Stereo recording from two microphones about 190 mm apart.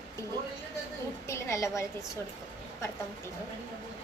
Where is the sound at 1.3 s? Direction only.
15° left (ahead or behind).